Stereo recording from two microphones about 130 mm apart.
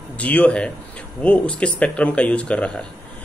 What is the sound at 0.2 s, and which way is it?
Speech, 10° left (ahead or behind).